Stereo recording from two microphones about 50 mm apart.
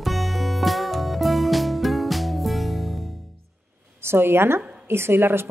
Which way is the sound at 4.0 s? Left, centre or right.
Right.